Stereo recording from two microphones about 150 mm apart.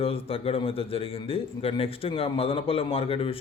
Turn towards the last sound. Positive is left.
turn(degrees=40)  # may be behind; listen again after turning